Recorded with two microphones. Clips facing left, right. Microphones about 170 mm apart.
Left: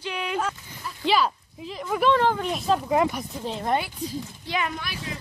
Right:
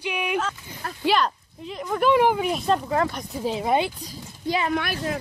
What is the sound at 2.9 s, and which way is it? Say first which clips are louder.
Speech: left 2 dB; 15° left (ahead or behind).